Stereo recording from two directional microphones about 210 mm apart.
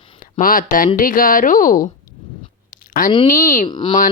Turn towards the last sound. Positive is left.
turn(degrees=20)  # may be behind; listen again after turning